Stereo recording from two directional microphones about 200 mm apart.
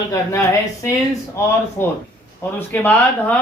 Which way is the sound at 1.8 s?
10° left (ahead or behind).